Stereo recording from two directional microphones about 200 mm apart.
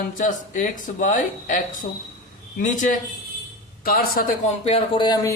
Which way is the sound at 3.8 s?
50° left (ahead or behind).